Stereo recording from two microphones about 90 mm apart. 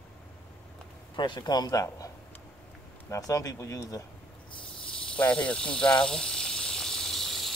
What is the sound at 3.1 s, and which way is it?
Speech, 40° left (ahead or behind).